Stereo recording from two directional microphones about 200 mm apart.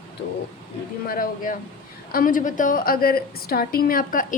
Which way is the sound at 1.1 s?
45° left (ahead or behind).